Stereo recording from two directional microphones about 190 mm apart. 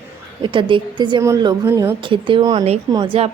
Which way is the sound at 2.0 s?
25° right (ahead or behind).